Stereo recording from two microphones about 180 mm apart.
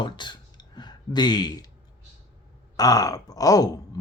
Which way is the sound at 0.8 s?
25° left (ahead or behind).